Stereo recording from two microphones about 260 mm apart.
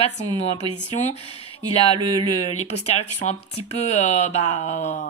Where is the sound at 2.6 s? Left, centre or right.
Left.